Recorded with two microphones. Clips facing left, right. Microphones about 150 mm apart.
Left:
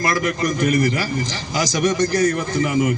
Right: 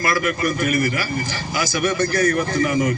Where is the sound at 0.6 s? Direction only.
35° left (ahead or behind).